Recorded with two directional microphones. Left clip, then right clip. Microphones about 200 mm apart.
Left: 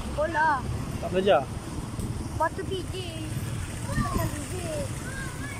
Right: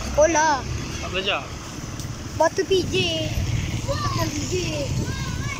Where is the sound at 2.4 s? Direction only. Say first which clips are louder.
Right 9 dB; 25° right (ahead or behind).